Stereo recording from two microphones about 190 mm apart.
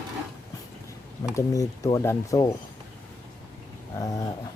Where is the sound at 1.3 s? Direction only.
15° left (ahead or behind).